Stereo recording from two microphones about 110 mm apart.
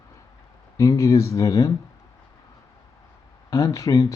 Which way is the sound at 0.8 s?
25° left (ahead or behind).